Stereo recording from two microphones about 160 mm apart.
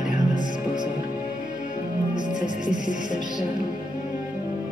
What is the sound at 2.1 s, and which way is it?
Music, 30° right (ahead or behind).